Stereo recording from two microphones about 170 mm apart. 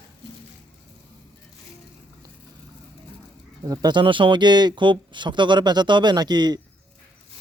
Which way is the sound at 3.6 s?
25° right (ahead or behind).